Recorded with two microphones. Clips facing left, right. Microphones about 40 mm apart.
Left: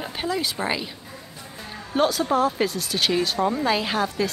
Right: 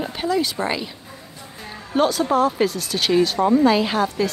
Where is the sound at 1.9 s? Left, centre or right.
Centre.